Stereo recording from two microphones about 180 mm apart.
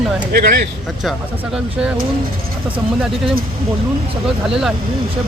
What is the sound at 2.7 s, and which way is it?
Speech, 5° right (ahead or behind).